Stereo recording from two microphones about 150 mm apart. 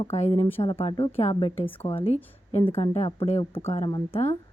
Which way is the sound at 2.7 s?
40° left (ahead or behind).